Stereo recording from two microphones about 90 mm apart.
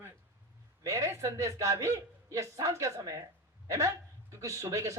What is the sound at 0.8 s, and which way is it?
A man's voice, 35° right (ahead or behind).